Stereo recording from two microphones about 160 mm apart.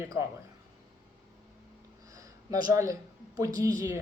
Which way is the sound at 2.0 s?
20° right (ahead or behind).